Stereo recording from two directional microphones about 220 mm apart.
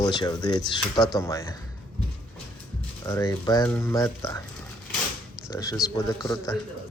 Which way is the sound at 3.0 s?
15° left (ahead or behind).